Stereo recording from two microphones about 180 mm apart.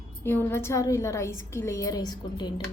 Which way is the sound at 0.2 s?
10° left (ahead or behind).